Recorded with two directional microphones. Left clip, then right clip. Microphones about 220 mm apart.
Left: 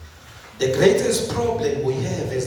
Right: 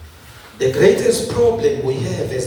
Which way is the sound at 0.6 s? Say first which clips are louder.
Right 4 dB; 30° left (ahead or behind).